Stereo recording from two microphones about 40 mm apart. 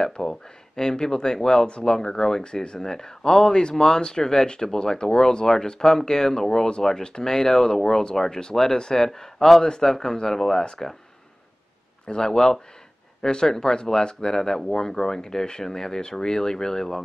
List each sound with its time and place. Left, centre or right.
0.0 s speech: centre
12.1 s speech: centre